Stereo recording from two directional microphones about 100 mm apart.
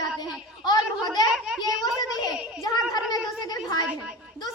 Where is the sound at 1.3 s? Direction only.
5° right (ahead or behind).